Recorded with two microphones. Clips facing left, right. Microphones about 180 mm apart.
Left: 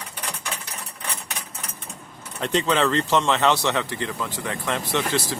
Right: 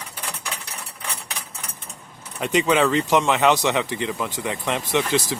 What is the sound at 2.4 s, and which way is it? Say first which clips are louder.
Speech: right 2 dB; 10° right (ahead or behind).